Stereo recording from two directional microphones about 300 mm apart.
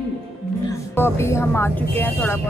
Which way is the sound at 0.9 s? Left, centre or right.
Centre.